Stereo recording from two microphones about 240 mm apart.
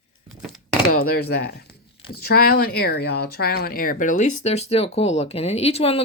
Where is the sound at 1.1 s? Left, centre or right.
Left.